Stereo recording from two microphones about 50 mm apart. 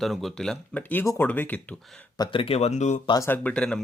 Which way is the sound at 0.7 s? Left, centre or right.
Left.